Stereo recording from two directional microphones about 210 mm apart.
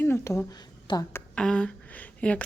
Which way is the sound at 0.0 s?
10° left (ahead or behind).